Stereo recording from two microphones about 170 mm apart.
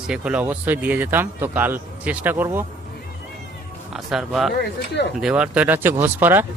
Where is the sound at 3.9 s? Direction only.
Centre (ahead or behind).